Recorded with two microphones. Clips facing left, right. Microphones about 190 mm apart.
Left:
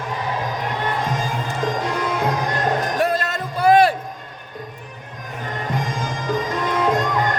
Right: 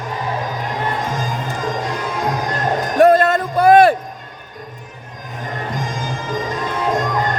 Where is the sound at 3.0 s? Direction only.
50° right (ahead or behind).